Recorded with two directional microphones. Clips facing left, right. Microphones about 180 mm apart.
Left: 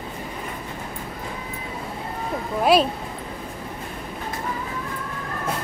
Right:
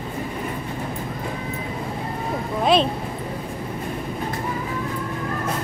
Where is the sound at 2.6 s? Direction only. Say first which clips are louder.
Left 1 dB; 5° left (ahead or behind).